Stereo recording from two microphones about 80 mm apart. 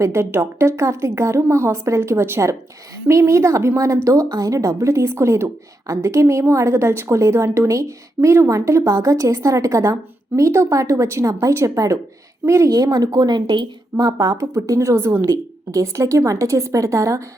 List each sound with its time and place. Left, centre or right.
0.0 s speech: right
12.7 s speech: right
14.0 s speech: right